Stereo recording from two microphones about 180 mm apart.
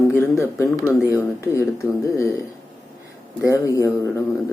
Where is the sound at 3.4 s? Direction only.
15° left (ahead or behind).